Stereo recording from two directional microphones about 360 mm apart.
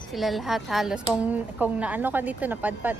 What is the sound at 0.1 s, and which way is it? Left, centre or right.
Speech, centre.